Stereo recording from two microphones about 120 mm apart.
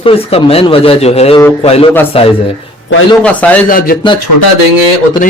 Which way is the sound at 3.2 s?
10° left (ahead or behind).